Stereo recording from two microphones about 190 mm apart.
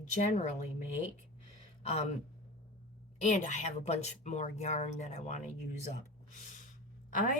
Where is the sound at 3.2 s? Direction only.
40° left (ahead or behind).